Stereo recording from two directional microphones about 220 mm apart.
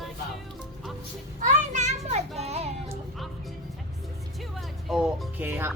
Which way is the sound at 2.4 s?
30° right (ahead or behind).